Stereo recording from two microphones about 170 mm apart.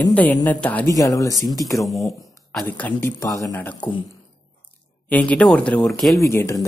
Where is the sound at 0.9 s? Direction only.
20° left (ahead or behind).